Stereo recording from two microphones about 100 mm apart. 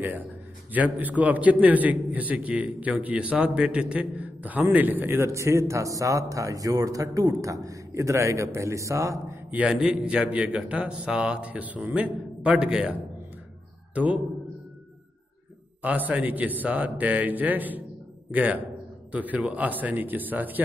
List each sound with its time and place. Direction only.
0.7 s a man's voice: 15° right (ahead or behind); by 9.4 s 30° right (ahead or behind)
9.5 s speech: 10° right (ahead or behind)
13.9 s speech: 15° right (ahead or behind)
15.8 s speech: 15° right (ahead or behind)